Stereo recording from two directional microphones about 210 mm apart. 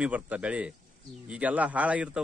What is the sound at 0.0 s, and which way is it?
A man's voice, 5° right (ahead or behind).